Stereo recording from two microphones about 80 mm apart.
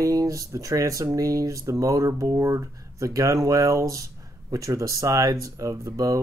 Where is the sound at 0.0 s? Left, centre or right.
Right.